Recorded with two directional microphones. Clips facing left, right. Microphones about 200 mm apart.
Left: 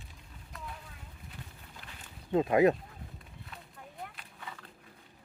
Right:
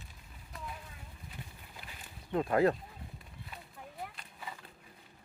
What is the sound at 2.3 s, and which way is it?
Speech, 20° left (ahead or behind).